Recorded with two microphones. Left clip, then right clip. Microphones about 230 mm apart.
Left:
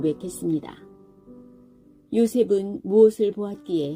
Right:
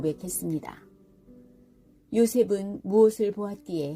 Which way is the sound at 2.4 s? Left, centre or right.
Centre.